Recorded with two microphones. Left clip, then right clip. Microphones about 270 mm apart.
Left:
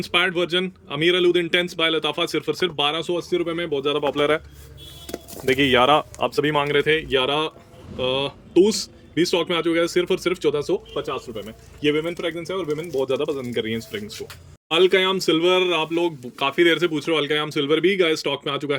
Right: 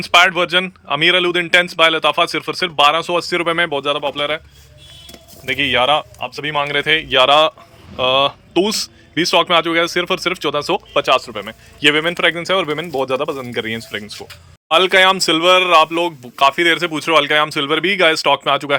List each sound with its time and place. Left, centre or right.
0.0 s speech: centre
10.9 s a man's voice: right
12.9 s speech: centre